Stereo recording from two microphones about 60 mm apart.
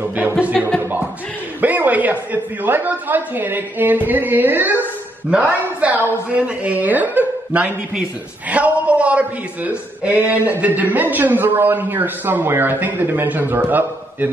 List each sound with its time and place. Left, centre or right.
0.6 s speech: centre
1.6 s a man's voice: right